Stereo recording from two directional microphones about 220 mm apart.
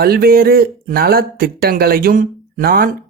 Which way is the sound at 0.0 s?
45° right (ahead or behind).